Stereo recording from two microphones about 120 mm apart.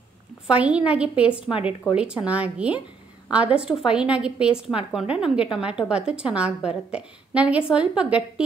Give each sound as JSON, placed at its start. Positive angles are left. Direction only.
{"t": 0.5, "sound": "a woman's voice", "side_deg": -10}